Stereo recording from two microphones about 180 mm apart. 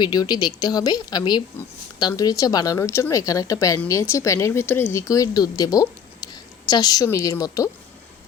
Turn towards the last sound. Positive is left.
turn(degrees=20)  # may be behind; listen again after turning